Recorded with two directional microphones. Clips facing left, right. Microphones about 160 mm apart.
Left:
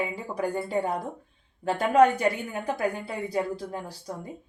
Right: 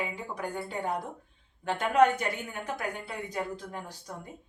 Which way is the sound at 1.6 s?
35° left (ahead or behind).